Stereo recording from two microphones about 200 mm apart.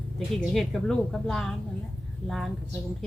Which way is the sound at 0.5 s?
Centre (ahead or behind).